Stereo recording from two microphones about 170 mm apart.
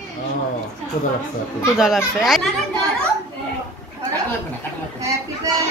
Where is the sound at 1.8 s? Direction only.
5° right (ahead or behind).